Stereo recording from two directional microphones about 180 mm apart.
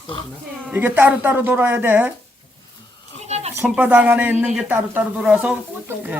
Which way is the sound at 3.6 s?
10° right (ahead or behind).